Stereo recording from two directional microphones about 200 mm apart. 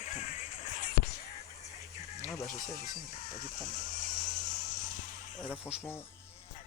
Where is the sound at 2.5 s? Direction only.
35° left (ahead or behind).